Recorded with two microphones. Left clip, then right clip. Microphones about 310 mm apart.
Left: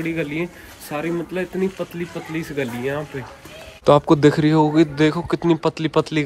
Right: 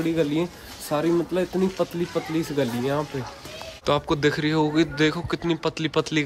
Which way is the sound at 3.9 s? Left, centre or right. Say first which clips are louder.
Left 8 dB; centre.